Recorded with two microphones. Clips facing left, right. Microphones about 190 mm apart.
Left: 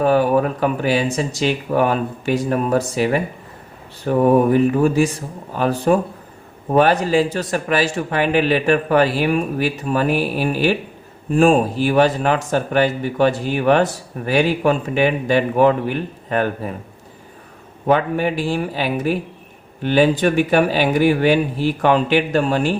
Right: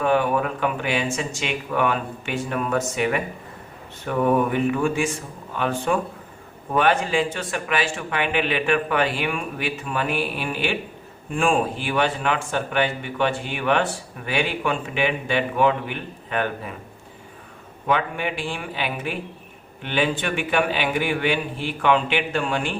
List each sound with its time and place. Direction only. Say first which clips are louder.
0.0 s speech: left 5 dB; 35° left (ahead or behind)
17.8 s speech: left 7 dB; 40° left (ahead or behind)